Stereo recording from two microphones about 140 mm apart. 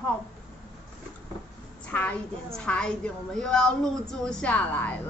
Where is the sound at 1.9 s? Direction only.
10° left (ahead or behind).